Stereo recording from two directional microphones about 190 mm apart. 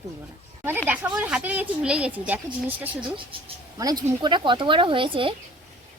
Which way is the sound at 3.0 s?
25° right (ahead or behind).